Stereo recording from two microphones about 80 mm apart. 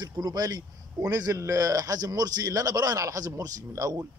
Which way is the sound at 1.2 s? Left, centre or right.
Right.